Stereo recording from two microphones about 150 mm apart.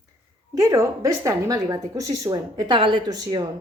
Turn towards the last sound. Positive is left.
turn(degrees=-25)  # may be behind; listen again after turning